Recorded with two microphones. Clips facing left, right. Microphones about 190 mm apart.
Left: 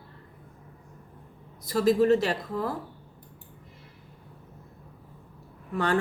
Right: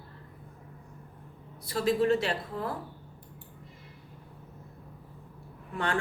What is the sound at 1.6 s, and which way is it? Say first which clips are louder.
Speech: left 4 dB; 40° left (ahead or behind).